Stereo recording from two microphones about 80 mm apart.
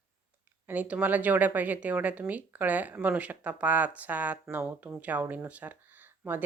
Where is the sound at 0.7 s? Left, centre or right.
Centre.